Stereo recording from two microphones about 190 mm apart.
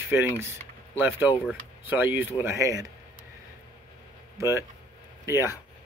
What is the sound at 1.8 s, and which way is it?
Speech, 10° right (ahead or behind).